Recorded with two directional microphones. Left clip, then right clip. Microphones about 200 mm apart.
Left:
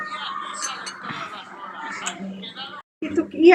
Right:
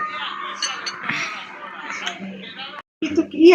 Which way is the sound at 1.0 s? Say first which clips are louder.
Right 8 dB; 10° right (ahead or behind).